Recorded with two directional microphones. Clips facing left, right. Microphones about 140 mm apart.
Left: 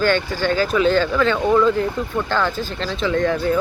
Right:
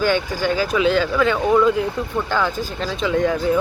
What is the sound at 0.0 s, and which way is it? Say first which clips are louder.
Speech: left 1 dB; 10° right (ahead or behind).